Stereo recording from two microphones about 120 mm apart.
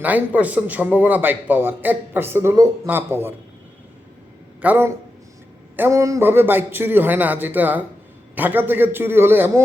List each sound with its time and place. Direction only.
0.0 s a man's voice: 15° right (ahead or behind)
4.6 s a man's voice: 15° right (ahead or behind)